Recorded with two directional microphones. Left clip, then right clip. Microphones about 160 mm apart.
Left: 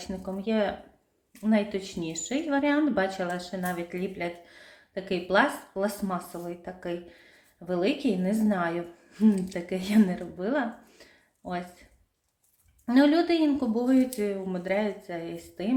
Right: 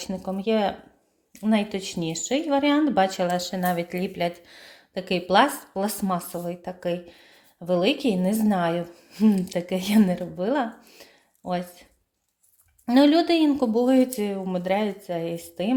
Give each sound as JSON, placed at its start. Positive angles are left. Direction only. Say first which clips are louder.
{"t": 0.0, "sound": "a woman's voice", "louder": "right 5 dB", "side_deg": -50}